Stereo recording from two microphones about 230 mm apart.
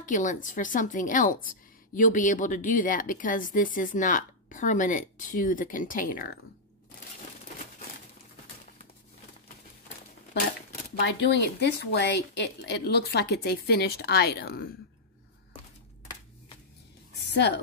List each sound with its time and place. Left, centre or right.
0.0 s speech: left
11.0 s a woman's voice: left
17.3 s speech: left